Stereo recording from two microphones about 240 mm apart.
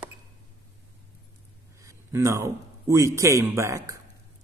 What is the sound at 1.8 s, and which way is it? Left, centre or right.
A man's voice, centre.